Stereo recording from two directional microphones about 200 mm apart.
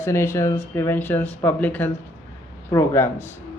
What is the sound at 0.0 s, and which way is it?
Speech, 15° left (ahead or behind).